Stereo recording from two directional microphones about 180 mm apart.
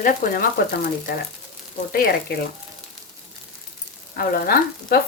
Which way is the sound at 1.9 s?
55° left (ahead or behind).